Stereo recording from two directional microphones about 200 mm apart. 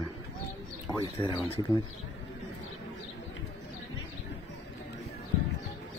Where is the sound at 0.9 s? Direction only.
25° left (ahead or behind).